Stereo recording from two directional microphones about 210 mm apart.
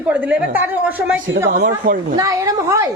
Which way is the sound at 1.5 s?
35° right (ahead or behind).